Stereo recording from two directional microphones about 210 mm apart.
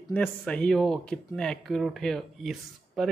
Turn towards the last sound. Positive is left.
turn(degrees=0)  # may be behind; listen again after turning